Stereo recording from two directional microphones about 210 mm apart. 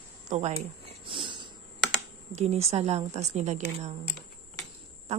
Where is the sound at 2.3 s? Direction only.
30° right (ahead or behind).